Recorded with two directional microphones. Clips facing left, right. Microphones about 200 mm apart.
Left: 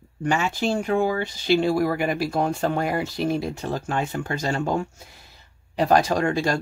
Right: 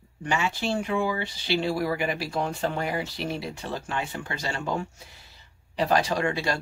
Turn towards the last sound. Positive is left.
turn(degrees=45)  # may be behind; listen again after turning